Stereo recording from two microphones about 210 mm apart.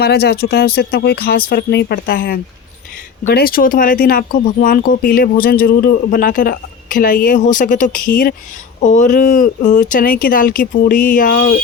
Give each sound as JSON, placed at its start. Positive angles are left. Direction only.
{"t": 0.0, "sound": "speech", "side_deg": 50}